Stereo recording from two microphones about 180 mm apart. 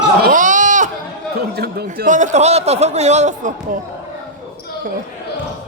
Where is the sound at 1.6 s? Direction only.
60° right (ahead or behind); by 3.8 s 45° right (ahead or behind).